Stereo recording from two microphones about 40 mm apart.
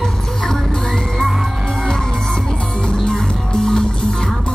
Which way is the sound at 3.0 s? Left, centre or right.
Centre.